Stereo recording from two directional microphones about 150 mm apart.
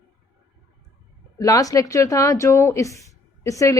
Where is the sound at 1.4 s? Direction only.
25° left (ahead or behind).